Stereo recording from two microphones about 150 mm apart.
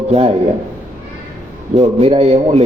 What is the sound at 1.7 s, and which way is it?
Speech, 45° right (ahead or behind).